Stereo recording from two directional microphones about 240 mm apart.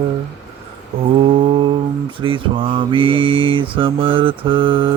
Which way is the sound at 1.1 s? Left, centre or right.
Right.